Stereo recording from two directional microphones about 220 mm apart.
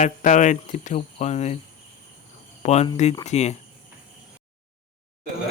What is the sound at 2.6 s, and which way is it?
Speech, 30° left (ahead or behind).